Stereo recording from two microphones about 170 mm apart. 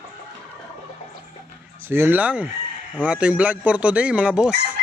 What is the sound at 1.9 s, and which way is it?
Speech, 10° right (ahead or behind).